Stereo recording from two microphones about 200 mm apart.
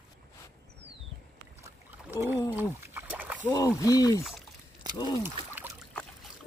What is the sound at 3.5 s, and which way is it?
Speech, 15° left (ahead or behind).